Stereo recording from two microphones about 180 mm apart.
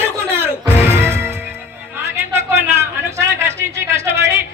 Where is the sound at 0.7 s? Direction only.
10° right (ahead or behind).